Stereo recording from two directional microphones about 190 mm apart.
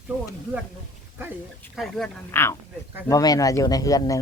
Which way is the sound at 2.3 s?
15° left (ahead or behind).